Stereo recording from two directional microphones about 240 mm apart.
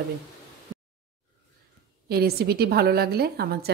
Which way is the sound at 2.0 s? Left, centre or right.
Right.